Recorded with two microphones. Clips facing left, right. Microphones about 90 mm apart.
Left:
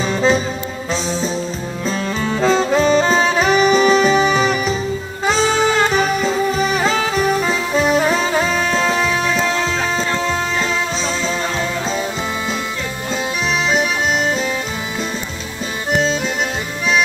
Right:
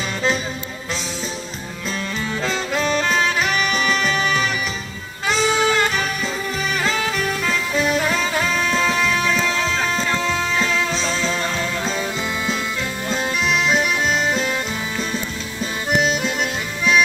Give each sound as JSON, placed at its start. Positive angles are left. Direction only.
{"t": 0.1, "sound": "music", "side_deg": 25}
{"t": 1.9, "sound": "music", "side_deg": 30}